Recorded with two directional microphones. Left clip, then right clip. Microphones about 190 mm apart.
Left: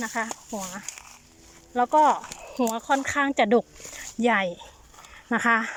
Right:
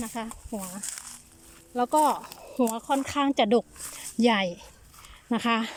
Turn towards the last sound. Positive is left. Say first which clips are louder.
# left 5 dB
turn(degrees=-15)  # may be behind; listen again after turning